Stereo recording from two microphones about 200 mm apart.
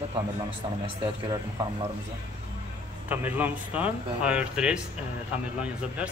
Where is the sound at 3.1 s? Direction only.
10° right (ahead or behind).